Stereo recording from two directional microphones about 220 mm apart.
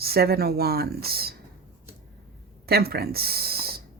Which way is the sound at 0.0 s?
45° right (ahead or behind).